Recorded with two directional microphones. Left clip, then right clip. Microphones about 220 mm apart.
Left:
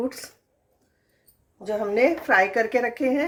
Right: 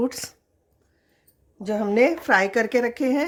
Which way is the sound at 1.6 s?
50° right (ahead or behind).